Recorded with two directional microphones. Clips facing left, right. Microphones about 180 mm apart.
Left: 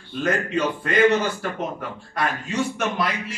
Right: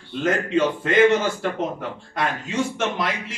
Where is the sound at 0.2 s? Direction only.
25° right (ahead or behind).